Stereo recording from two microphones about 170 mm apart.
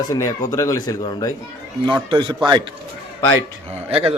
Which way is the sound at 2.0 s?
30° right (ahead or behind).